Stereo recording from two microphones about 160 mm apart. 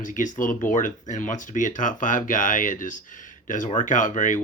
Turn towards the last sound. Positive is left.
turn(degrees=55)  # may be behind; listen again after turning